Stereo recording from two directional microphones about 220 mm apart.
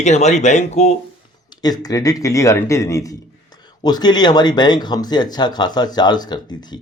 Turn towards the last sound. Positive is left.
turn(degrees=20)  # may be behind; listen again after turning